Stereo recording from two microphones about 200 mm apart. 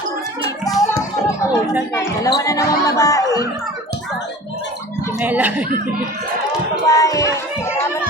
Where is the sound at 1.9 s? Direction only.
15° left (ahead or behind).